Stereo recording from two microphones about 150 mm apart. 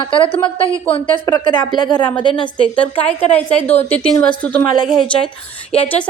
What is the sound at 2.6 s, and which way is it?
Speech, 10° left (ahead or behind).